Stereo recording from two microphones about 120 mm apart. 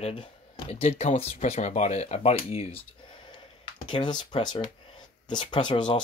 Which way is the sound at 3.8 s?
40° left (ahead or behind).